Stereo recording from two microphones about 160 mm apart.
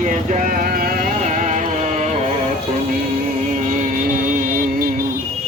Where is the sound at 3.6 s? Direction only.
55° right (ahead or behind).